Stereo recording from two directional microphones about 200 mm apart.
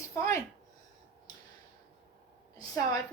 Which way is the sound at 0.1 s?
15° left (ahead or behind).